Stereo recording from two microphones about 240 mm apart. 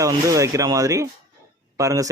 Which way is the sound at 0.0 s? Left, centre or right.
Centre.